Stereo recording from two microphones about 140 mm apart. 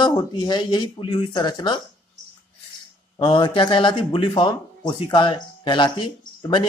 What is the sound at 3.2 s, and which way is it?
Speech, 35° left (ahead or behind).